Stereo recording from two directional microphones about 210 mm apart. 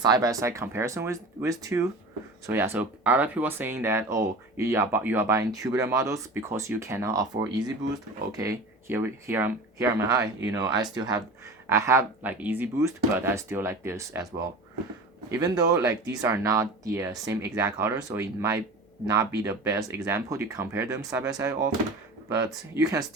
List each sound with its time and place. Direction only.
0.0 s speech: 20° right (ahead or behind)
15.3 s speech: 15° right (ahead or behind)
22.7 s speech: 15° right (ahead or behind)